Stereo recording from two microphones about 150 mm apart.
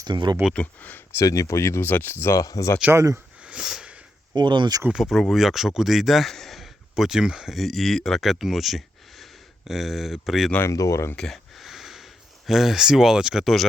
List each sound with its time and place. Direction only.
0.0 s speech: 30° right (ahead or behind)
0.5 s speech: 10° left (ahead or behind)
1.2 s speech: 20° left (ahead or behind)
2.8 s speech: 20° right (ahead or behind)
3.4 s a sound: 5° right (ahead or behind)
4.4 s speech: 30° right (ahead or behind)
4.8 s speech: 5° right (ahead or behind)
10.6 s speech: 20° left (ahead or behind)
11.2 s a sound: centre (ahead or behind)